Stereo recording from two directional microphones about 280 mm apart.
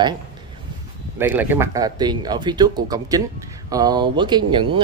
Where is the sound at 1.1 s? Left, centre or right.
Centre.